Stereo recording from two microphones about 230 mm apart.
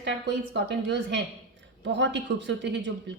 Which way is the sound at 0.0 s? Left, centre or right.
Right.